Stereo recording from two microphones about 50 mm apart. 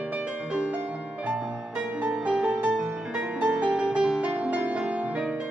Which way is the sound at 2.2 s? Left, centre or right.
Centre.